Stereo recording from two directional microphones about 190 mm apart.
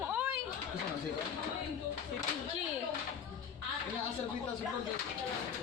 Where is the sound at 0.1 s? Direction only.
5° right (ahead or behind).